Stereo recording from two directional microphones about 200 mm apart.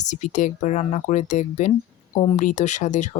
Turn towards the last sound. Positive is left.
turn(degrees=35)  # may be behind; listen again after turning